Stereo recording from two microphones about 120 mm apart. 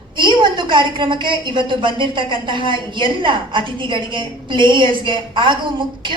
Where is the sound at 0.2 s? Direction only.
40° right (ahead or behind).